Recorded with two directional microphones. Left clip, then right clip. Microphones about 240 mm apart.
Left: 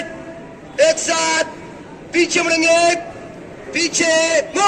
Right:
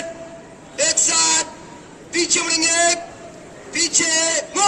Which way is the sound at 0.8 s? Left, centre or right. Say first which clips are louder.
Left 4 dB; right.